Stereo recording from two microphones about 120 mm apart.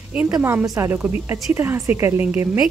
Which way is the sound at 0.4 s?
20° right (ahead or behind).